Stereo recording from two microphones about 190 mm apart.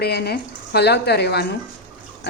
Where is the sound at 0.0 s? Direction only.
55° left (ahead or behind).